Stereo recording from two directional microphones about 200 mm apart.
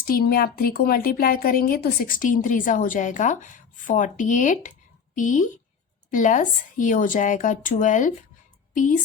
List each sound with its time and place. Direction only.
0.0 s a woman's voice: 45° left (ahead or behind)